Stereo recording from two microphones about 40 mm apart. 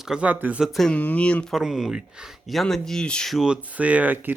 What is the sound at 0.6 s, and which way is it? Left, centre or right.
Speech, centre.